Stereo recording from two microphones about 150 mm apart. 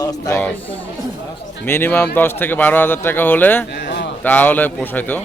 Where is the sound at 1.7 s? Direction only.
15° left (ahead or behind).